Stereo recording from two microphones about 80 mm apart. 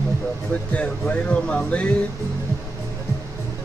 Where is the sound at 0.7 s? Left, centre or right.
Centre.